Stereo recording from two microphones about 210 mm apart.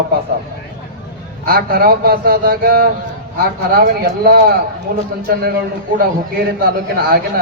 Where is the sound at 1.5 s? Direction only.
45° right (ahead or behind).